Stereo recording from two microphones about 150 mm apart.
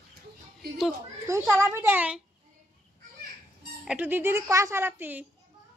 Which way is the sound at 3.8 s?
10° right (ahead or behind).